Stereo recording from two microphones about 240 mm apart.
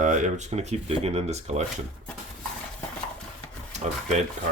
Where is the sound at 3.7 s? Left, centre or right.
Right.